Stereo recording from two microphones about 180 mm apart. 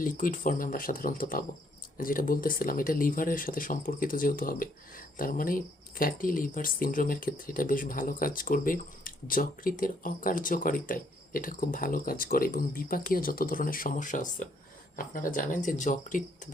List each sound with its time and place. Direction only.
0.0 s speech: 50° left (ahead or behind)